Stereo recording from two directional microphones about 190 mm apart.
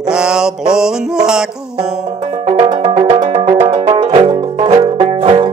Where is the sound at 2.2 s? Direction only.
30° right (ahead or behind).